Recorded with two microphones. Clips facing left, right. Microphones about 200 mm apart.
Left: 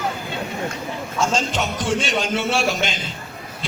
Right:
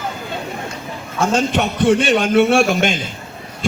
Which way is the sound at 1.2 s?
60° right (ahead or behind).